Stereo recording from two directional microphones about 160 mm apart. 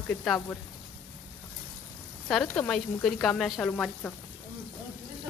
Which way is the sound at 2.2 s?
5° left (ahead or behind).